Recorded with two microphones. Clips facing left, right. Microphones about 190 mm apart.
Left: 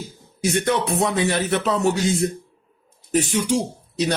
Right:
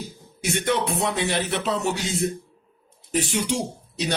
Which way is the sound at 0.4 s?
40° left (ahead or behind).